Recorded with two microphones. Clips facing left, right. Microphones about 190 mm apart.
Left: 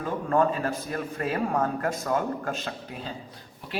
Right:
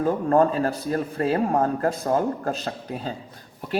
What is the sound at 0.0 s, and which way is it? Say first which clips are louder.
A man's voice: right 5 dB; 40° right (ahead or behind).